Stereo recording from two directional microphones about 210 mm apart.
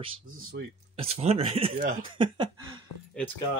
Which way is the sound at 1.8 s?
40° right (ahead or behind).